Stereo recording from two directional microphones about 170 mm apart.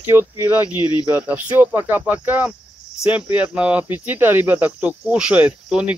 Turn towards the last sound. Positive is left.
turn(degrees=-5)  # may be behind; listen again after turning